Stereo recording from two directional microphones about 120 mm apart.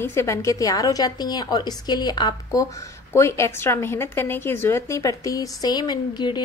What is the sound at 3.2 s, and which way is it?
A woman's voice, 20° left (ahead or behind).